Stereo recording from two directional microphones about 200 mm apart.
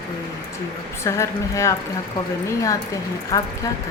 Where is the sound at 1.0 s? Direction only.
15° left (ahead or behind).